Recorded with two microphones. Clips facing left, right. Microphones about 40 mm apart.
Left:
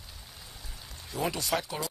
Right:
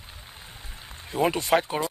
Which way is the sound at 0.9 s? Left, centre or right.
Right.